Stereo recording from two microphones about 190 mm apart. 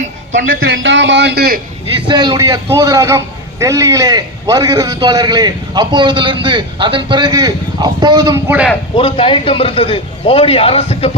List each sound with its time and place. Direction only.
0.5 s a man's voice: 90° right; by 1.6 s 55° right (ahead or behind)
2.0 s a man's voice: 25° right (ahead or behind)
9.0 s a man's voice: 30° left (ahead or behind)